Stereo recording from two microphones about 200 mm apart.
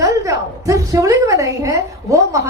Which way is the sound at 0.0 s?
15° right (ahead or behind).